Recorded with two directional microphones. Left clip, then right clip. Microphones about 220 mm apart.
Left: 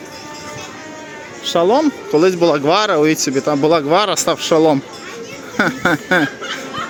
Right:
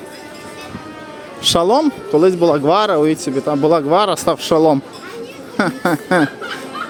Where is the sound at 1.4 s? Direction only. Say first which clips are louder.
Right 1 dB; 30° right (ahead or behind).